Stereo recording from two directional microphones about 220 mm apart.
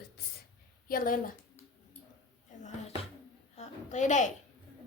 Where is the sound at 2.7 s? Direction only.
30° left (ahead or behind).